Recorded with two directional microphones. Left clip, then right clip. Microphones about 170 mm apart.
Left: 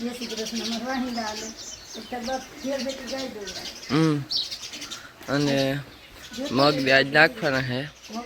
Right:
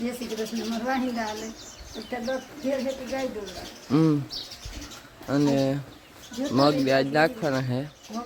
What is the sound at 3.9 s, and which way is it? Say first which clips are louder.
Speech: even; 10° right (ahead or behind).